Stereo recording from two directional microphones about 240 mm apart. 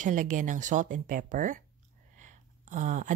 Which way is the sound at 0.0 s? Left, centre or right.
Right.